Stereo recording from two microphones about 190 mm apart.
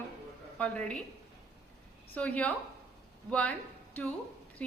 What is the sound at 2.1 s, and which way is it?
A woman's voice, 5° left (ahead or behind).